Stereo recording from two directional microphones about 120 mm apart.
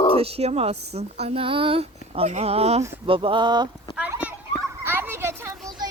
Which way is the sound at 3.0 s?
45° right (ahead or behind).